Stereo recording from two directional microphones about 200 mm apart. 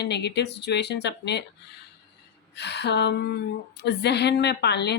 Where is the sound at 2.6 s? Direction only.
55° left (ahead or behind).